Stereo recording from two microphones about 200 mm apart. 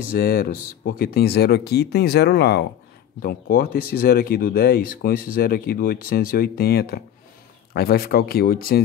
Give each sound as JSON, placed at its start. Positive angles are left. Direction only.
{"t": 0.1, "sound": "speech", "side_deg": 50}